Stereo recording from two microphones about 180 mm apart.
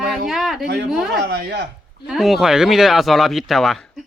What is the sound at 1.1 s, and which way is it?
Speech, 65° right (ahead or behind).